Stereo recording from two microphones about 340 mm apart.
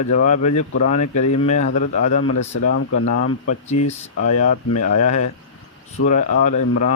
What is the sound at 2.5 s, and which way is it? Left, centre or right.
Speech, left.